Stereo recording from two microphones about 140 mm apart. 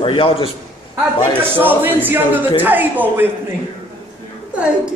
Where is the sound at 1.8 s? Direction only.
15° right (ahead or behind).